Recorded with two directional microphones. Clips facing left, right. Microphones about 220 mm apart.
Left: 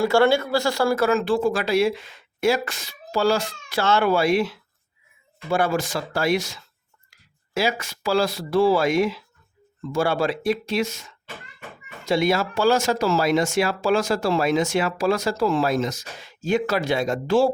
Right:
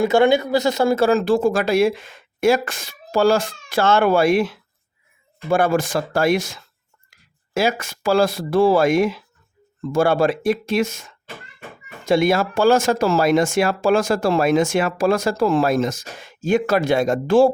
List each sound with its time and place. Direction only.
0.0 s speech: 20° right (ahead or behind); by 17.5 s 50° right (ahead or behind)